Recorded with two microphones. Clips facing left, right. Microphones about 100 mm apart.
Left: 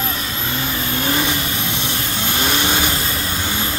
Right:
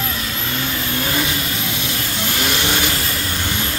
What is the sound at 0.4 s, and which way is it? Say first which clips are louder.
Vehicle: left 1 dB; 15° left (ahead or behind).